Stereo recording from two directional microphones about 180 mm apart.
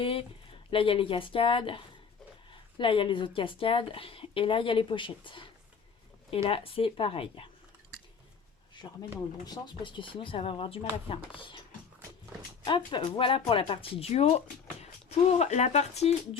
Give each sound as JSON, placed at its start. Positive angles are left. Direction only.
{"t": 0.0, "sound": "speech", "side_deg": 30}
{"t": 8.7, "sound": "a sound", "side_deg": 25}
{"t": 9.5, "sound": "speech", "side_deg": 25}
{"t": 12.6, "sound": "speech", "side_deg": 25}